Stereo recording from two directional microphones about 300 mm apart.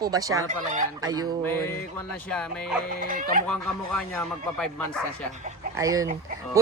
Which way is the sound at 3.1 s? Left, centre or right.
Right.